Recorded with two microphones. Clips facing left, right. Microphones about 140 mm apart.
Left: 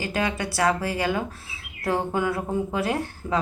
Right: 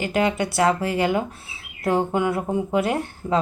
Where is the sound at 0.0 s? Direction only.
25° right (ahead or behind).